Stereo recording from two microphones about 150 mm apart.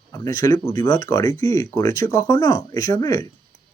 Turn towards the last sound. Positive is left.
turn(degrees=20)  # may be behind; listen again after turning